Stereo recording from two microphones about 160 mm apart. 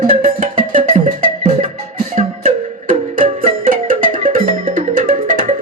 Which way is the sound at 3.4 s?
60° right (ahead or behind).